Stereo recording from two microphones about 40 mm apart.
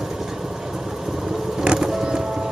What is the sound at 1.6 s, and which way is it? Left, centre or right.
Vehicle, centre.